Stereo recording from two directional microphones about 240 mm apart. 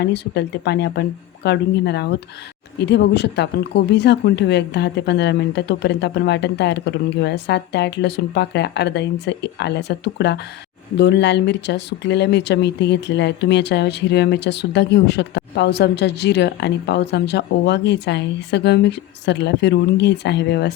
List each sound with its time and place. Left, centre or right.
0.0 s speech: left